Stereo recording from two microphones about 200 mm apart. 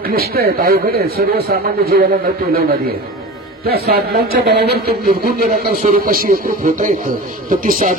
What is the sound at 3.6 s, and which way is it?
Speech, 50° right (ahead or behind).